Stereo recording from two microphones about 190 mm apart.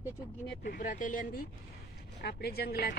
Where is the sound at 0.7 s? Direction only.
45° left (ahead or behind).